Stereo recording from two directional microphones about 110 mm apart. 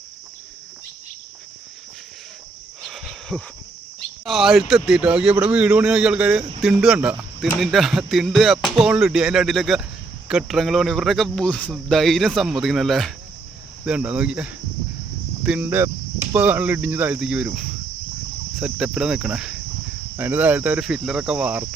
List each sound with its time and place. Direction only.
2.8 s cricket: centre (ahead or behind)
4.3 s speech: centre (ahead or behind)
13.8 s speech: 10° right (ahead or behind)